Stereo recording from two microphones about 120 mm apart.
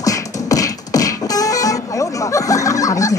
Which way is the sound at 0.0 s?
30° left (ahead or behind).